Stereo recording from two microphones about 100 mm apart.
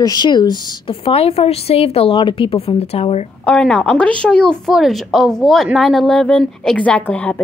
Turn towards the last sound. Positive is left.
turn(degrees=15)  # may be behind; listen again after turning